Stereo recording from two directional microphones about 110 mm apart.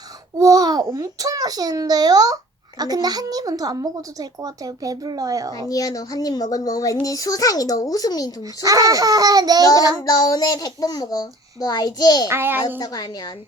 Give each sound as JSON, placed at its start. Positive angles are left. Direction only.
{"t": 0.3, "sound": "babbling", "side_deg": -35}
{"t": 0.9, "sound": "a child's voice", "side_deg": -30}
{"t": 5.6, "sound": "a child's voice", "side_deg": 35}
{"t": 8.6, "sound": "a child's voice", "side_deg": -35}
{"t": 10.0, "sound": "a child's voice", "side_deg": 35}
{"t": 12.3, "sound": "a child's voice", "side_deg": -20}
{"t": 12.8, "sound": "a child's voice", "side_deg": 35}